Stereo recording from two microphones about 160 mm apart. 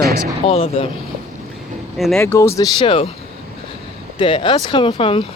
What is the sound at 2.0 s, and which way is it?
Speech, centre (ahead or behind).